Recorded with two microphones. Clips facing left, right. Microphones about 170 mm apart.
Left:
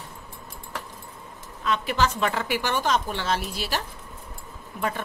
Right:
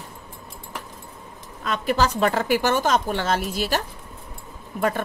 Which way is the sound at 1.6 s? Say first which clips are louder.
Right 2 dB; 45° right (ahead or behind).